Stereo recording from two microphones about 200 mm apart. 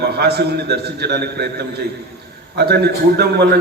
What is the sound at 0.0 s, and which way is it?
A man's voice, 55° right (ahead or behind).